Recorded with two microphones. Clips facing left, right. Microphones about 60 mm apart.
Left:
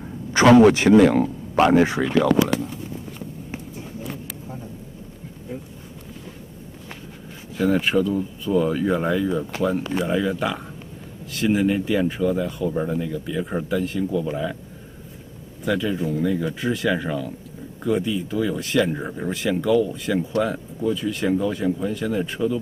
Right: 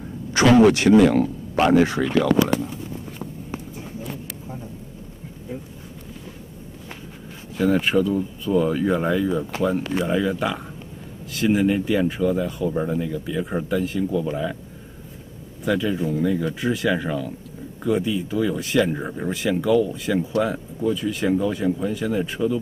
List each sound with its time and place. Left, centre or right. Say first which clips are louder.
0.4 s speech: left 2 dB; left
7.5 s speech: right 1 dB; centre
15.6 s speech: right 1 dB; centre